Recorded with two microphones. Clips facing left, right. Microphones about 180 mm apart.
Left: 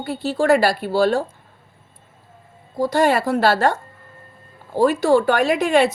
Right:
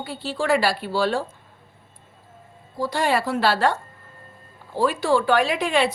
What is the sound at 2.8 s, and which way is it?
A woman's voice, 45° left (ahead or behind).